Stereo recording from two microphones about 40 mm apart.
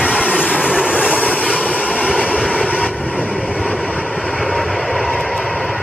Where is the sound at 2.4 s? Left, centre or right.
Centre.